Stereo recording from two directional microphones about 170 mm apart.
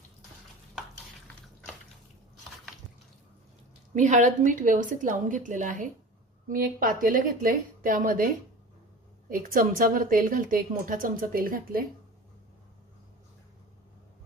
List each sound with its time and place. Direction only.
3.9 s a woman's voice: 45° right (ahead or behind)
9.3 s a woman's voice: 50° right (ahead or behind)